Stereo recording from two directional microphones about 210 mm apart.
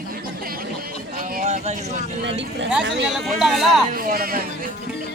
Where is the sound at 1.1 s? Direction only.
40° right (ahead or behind).